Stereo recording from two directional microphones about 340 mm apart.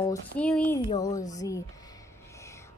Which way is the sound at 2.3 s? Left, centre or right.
Centre.